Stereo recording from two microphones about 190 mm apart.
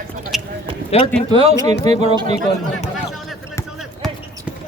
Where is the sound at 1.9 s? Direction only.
35° right (ahead or behind).